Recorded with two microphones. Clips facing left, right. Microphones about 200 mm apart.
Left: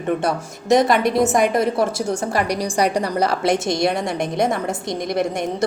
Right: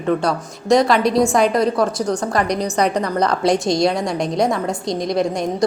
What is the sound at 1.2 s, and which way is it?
Speech, 25° left (ahead or behind).